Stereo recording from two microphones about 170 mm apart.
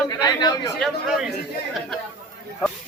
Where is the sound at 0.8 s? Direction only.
Centre (ahead or behind).